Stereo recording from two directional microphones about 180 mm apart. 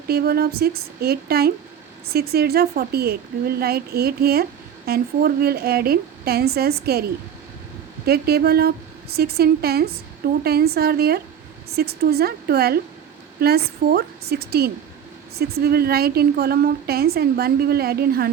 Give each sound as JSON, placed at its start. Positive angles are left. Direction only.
{"t": 0.1, "sound": "a woman's voice", "side_deg": -60}
{"t": 8.0, "sound": "a woman's voice", "side_deg": -60}